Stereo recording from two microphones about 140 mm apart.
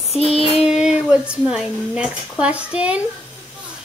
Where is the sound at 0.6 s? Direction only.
5° right (ahead or behind).